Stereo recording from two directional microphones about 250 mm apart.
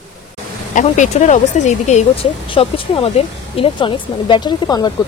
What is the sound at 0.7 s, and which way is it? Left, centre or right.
Speech, left.